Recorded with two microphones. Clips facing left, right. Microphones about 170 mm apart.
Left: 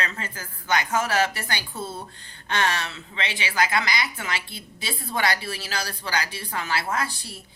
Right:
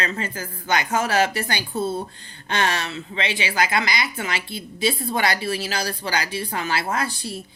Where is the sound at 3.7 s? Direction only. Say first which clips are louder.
Right 2 dB; 20° right (ahead or behind).